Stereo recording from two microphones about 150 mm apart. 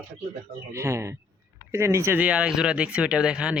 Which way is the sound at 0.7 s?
20° right (ahead or behind).